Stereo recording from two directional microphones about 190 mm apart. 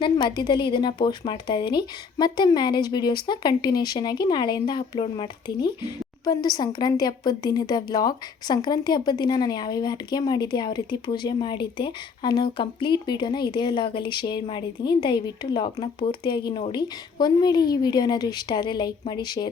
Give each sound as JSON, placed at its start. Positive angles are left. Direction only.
{"t": 0.0, "sound": "a woman's voice", "side_deg": 25}